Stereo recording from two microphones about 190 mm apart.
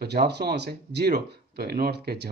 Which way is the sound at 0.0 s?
60° right (ahead or behind).